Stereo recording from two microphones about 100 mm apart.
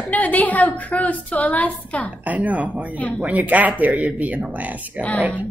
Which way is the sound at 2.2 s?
15° right (ahead or behind).